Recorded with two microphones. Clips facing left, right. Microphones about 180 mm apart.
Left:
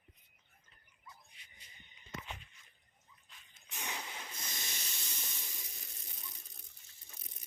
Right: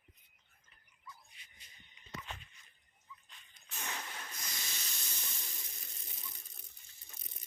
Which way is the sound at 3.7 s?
15° left (ahead or behind).